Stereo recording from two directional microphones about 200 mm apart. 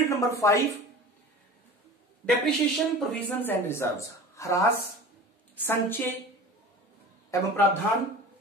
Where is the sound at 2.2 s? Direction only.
5° left (ahead or behind).